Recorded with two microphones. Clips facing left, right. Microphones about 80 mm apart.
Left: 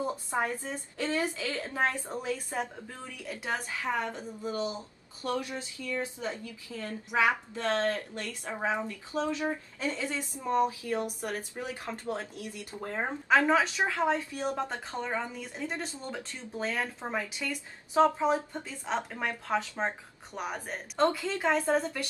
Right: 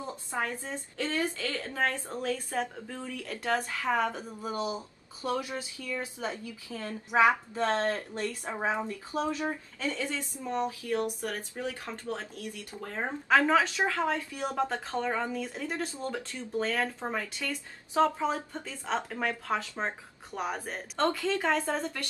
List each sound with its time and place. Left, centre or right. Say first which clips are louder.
0.0 s a woman's voice: left 3 dB; left; by 4.0 s centre
4.1 s speech: even; centre
6.7 s a woman's voice: right 2 dB; right
9.8 s a woman's voice: even; centre